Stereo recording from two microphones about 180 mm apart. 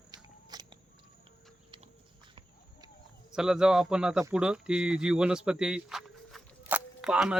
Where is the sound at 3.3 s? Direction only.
5° right (ahead or behind).